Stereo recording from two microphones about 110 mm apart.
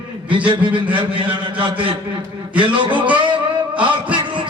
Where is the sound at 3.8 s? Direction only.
50° right (ahead or behind).